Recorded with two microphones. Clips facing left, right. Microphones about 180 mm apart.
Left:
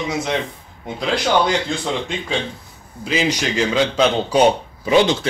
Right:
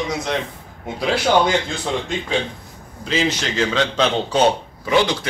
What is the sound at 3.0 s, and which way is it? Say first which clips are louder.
A man's voice: left 1 dB; 10° left (ahead or behind).